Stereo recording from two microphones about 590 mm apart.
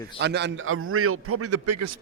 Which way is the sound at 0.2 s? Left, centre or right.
Centre.